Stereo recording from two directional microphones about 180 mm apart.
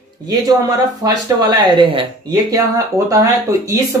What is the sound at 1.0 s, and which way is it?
Speech, 25° right (ahead or behind).